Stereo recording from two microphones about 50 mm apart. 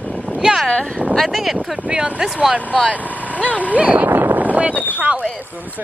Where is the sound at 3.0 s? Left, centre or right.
Left.